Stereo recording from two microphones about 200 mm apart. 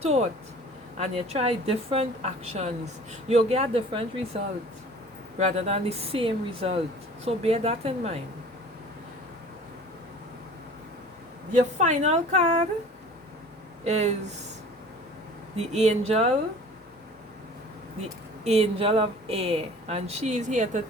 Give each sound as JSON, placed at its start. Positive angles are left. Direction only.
{"t": 0.0, "sound": "a woman's voice", "side_deg": -30}
{"t": 5.4, "sound": "a woman's voice", "side_deg": -35}
{"t": 11.8, "sound": "a woman's voice", "side_deg": -35}
{"t": 13.8, "sound": "a woman's voice", "side_deg": -35}
{"t": 15.5, "sound": "a woman's voice", "side_deg": -35}
{"t": 18.4, "sound": "a woman's voice", "side_deg": -30}